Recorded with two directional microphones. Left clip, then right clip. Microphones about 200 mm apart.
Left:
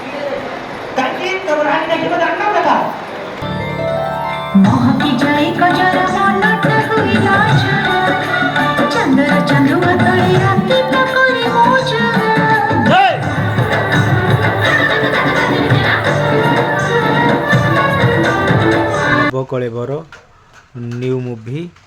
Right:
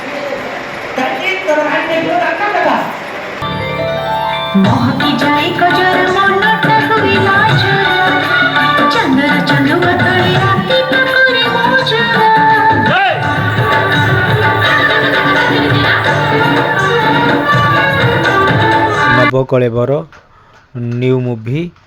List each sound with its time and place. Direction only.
4.0 s music: 40° right (ahead or behind)
19.4 s speech: 20° right (ahead or behind)